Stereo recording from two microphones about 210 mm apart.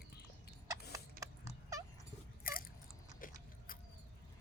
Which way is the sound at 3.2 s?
40° left (ahead or behind).